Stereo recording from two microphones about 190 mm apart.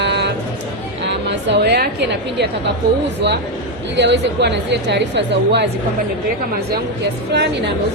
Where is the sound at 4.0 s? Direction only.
65° right (ahead or behind).